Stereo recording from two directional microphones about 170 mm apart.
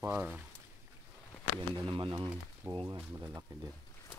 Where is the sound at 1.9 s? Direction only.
25° right (ahead or behind).